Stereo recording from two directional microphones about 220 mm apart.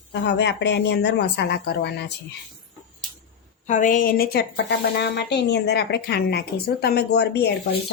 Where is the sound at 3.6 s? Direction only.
35° left (ahead or behind).